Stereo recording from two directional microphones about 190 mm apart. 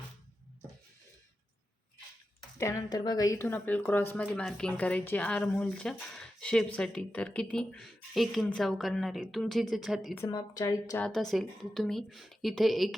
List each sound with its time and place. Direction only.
2.6 s speech: 15° left (ahead or behind); by 10.2 s centre (ahead or behind)
10.2 s a woman's voice: 20° left (ahead or behind)
11.0 s speech: centre (ahead or behind)